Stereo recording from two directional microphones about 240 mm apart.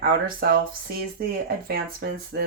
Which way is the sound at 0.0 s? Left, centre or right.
Right.